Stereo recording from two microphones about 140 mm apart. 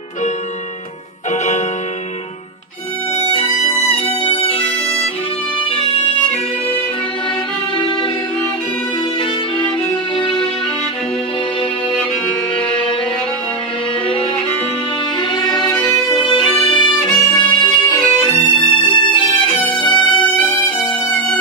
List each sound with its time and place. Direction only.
1.3 s music: 55° left (ahead or behind)
3.2 s violin: 40° left (ahead or behind)
4.2 s bagpipes: 45° left (ahead or behind)
5.7 s music: 40° left (ahead or behind)
7.7 s music: 35° left (ahead or behind)
10.1 s music: 35° left (ahead or behind)
15.3 s violin: 30° left (ahead or behind)